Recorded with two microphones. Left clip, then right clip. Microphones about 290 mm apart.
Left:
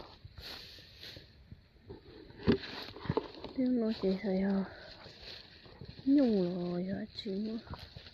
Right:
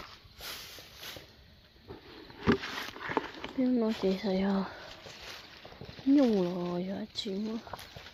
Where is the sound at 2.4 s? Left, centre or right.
Right.